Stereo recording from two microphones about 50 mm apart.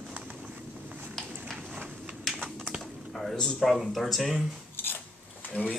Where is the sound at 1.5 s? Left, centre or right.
Right.